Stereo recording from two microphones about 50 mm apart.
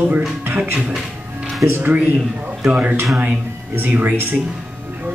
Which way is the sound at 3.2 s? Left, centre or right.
Right.